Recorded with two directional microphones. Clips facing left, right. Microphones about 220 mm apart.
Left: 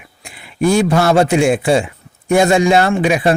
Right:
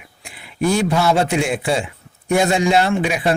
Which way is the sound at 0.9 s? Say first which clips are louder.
Left 5 dB; 50° left (ahead or behind).